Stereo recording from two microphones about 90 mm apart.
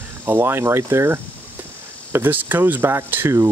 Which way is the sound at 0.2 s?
25° right (ahead or behind).